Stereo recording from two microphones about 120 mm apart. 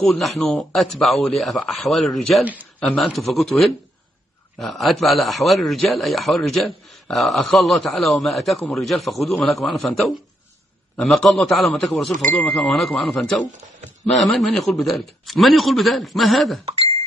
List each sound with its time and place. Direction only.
0.0 s a man's voice: centre (ahead or behind)
2.4 s speech: 15° right (ahead or behind)
2.9 s a man's voice: centre (ahead or behind)